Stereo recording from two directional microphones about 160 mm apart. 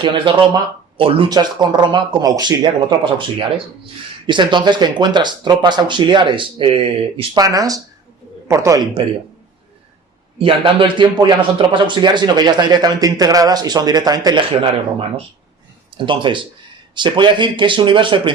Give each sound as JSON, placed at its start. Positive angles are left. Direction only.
{"t": 0.0, "sound": "a man's voice", "side_deg": -30}
{"t": 7.4, "sound": "speech", "side_deg": -20}
{"t": 10.3, "sound": "a man's voice", "side_deg": -30}